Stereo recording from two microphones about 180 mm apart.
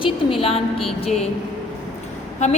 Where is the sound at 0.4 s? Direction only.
30° left (ahead or behind).